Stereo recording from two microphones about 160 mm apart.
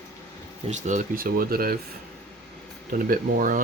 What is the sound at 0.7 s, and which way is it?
Speech, 50° right (ahead or behind).